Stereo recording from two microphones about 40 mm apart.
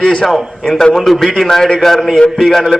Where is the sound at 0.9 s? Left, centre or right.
Centre.